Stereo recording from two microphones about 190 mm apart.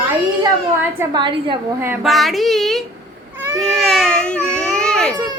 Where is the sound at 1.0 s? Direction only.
25° right (ahead or behind).